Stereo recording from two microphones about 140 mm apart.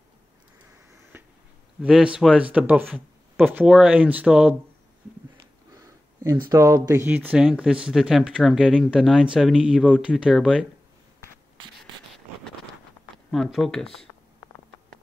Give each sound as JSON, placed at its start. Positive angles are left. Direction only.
{"t": 1.1, "sound": "a sound", "side_deg": -15}
{"t": 1.8, "sound": "speech", "side_deg": -5}
{"t": 5.8, "sound": "speech", "side_deg": -25}
{"t": 13.3, "sound": "speech", "side_deg": 0}